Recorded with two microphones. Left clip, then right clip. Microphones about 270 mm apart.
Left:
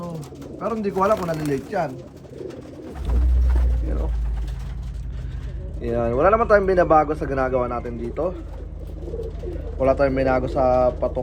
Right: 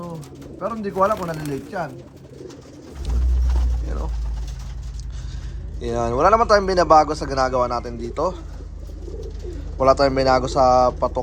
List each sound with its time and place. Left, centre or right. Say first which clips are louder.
0.0 s speech: left 1 dB; centre
5.8 s a man's voice: right 1 dB; centre
9.8 s a man's voice: right 3 dB; centre